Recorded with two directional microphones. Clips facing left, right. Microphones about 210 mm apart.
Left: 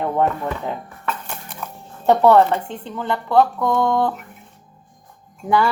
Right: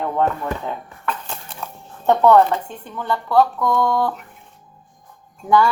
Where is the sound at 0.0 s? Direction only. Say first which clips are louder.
Left 1 dB; 20° left (ahead or behind).